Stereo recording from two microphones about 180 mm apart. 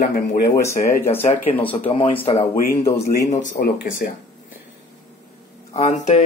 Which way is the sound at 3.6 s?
55° left (ahead or behind).